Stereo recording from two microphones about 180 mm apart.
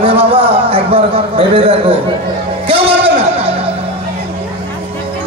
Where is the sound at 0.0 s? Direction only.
30° right (ahead or behind).